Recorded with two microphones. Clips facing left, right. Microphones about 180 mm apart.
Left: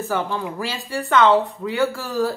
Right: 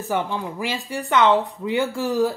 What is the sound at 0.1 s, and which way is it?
Speech, 15° right (ahead or behind).